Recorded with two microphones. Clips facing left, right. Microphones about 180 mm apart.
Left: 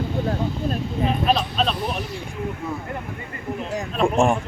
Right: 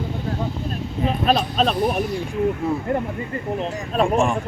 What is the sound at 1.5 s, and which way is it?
Speech, 50° right (ahead or behind).